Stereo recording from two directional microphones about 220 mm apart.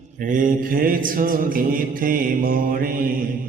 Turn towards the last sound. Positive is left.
turn(degrees=-40)  # may be behind; listen again after turning